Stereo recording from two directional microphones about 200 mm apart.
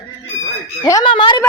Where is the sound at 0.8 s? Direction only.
20° left (ahead or behind).